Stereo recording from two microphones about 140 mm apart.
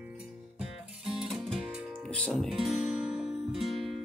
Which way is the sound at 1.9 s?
5° left (ahead or behind).